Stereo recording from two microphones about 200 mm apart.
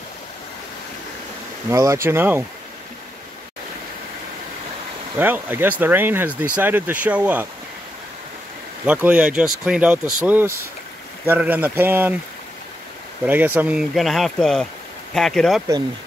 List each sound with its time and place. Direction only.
1.7 s speech: 15° right (ahead or behind)
5.2 s speech: 10° right (ahead or behind)
8.8 s speech: 10° right (ahead or behind)
13.2 s speech: 10° right (ahead or behind)